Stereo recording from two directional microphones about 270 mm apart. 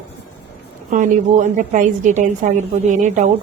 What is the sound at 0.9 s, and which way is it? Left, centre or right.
A woman's voice, right.